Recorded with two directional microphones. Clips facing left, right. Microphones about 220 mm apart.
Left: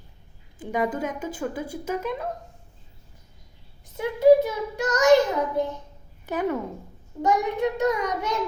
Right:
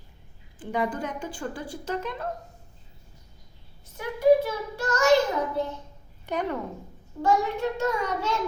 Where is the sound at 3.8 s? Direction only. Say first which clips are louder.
Left 4 dB; 20° left (ahead or behind).